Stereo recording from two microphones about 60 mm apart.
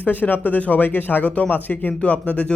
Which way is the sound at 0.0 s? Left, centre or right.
Left.